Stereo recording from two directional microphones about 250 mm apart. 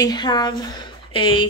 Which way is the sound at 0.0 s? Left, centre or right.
Centre.